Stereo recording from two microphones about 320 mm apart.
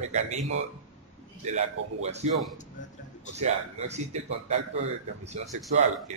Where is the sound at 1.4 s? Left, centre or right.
Right.